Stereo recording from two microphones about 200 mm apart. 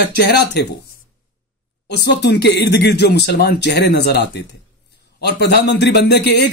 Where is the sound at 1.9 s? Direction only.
55° left (ahead or behind).